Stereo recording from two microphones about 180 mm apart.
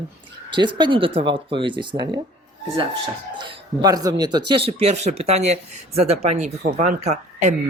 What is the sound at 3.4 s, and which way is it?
Speech, 20° right (ahead or behind).